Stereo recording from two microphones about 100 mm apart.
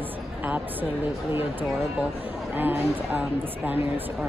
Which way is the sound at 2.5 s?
20° right (ahead or behind).